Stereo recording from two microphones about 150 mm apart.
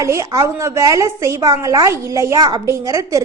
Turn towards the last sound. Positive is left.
turn(degrees=-20)  # may be behind; listen again after turning